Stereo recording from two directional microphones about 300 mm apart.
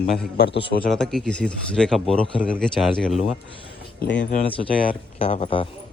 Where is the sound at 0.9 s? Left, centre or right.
Centre.